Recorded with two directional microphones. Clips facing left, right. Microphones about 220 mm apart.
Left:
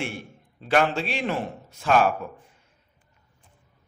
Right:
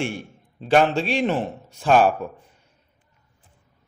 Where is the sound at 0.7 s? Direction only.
30° right (ahead or behind).